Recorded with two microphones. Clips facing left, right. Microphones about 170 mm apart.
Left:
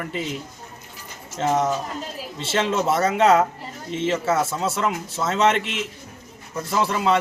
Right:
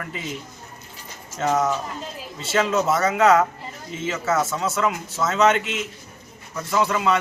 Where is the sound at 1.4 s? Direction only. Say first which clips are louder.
Even; 25° left (ahead or behind).